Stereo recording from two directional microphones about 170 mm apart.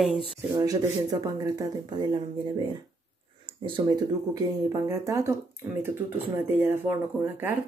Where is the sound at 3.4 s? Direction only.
30° right (ahead or behind).